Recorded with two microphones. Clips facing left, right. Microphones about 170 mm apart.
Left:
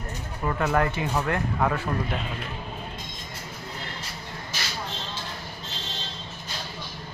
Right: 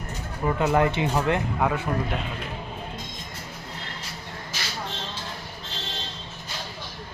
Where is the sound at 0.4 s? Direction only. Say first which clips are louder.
Right 3 dB; 20° right (ahead or behind).